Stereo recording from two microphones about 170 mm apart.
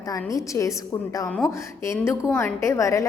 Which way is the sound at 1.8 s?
15° left (ahead or behind).